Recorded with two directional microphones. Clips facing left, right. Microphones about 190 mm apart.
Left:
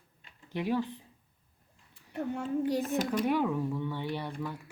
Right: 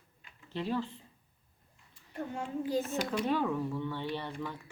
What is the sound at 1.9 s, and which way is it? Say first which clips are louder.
Speech: left 4 dB; 65° left (ahead or behind).